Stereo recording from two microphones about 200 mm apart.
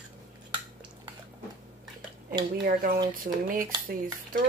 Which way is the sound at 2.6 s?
45° right (ahead or behind).